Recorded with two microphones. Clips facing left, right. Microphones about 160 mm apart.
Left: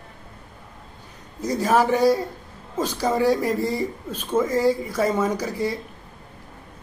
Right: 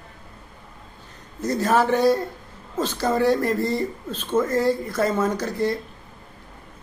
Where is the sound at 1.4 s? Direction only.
10° left (ahead or behind).